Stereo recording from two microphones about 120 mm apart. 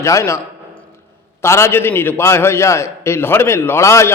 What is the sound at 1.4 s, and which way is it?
A man's voice, 25° left (ahead or behind).